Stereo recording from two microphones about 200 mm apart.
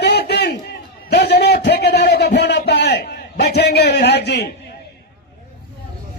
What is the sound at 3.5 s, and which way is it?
Speech, 55° left (ahead or behind).